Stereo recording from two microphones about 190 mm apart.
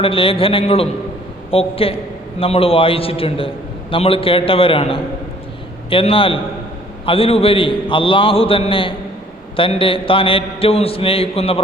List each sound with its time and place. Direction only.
0.0 s a man's voice: 30° left (ahead or behind)